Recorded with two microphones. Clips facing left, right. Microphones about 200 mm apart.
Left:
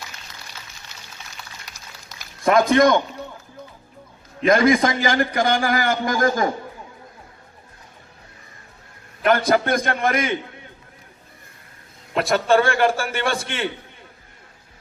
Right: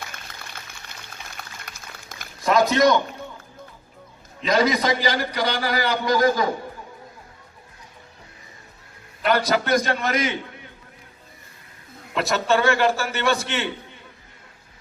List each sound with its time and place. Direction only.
1.3 s music: 55° right (ahead or behind)
2.4 s a man's voice: 55° left (ahead or behind)
4.4 s a man's voice: 50° left (ahead or behind)
9.2 s a man's voice: 50° left (ahead or behind)
12.1 s a man's voice: 55° left (ahead or behind)